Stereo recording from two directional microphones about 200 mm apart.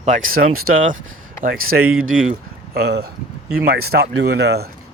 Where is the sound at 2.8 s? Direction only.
55° right (ahead or behind).